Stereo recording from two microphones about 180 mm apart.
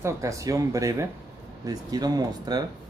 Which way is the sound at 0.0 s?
15° right (ahead or behind).